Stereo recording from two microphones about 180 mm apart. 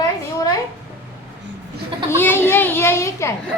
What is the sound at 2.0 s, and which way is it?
A child's voice, 15° left (ahead or behind).